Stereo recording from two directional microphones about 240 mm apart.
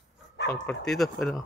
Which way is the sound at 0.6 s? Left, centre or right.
Centre.